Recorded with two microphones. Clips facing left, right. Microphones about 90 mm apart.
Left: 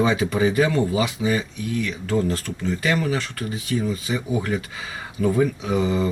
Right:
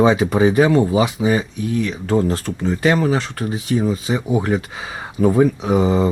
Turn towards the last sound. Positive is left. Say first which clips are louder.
# right 5 dB
turn(degrees=-30)  # may be behind; listen again after turning